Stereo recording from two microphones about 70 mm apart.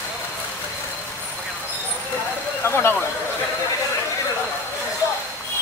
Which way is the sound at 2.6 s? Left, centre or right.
Left.